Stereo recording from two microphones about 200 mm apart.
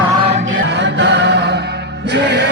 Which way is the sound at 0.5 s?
60° right (ahead or behind).